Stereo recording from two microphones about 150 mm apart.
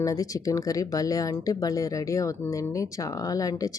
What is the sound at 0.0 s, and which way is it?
Speech, 25° left (ahead or behind).